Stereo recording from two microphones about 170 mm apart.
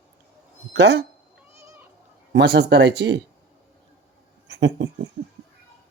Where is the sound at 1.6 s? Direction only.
15° right (ahead or behind).